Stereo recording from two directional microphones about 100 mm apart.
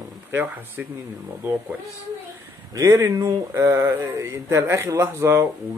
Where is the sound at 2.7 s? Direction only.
35° right (ahead or behind).